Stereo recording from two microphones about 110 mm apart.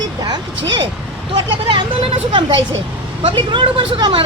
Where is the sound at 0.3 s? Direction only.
45° right (ahead or behind).